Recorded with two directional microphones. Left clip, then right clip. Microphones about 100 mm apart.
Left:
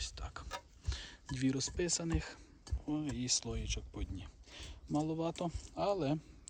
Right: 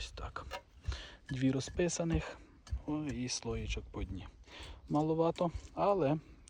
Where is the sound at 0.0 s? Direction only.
Centre (ahead or behind).